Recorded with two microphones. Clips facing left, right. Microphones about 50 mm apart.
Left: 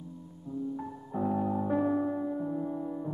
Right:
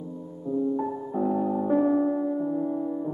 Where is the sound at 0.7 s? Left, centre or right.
Centre.